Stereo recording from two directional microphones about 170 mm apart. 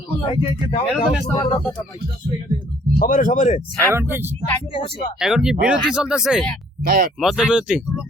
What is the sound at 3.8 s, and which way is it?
Speech, 15° right (ahead or behind).